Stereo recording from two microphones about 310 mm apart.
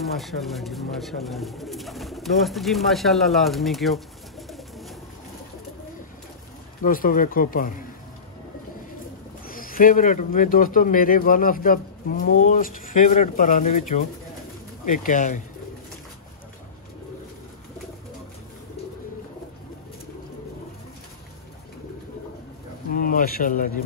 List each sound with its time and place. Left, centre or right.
0.0 s speech: centre
4.5 s bird: centre
6.8 s speech: left
9.5 s speech: left
22.9 s speech: left